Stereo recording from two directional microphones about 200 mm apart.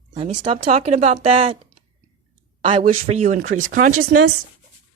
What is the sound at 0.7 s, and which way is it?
Speech, 35° right (ahead or behind).